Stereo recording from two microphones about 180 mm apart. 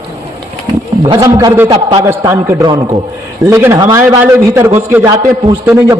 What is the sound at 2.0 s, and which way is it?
A man's voice, 15° right (ahead or behind).